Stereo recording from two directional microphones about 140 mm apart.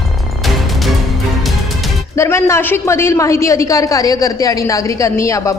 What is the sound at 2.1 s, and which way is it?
A man's voice, 20° left (ahead or behind).